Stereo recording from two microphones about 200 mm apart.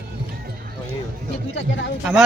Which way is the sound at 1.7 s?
65° left (ahead or behind).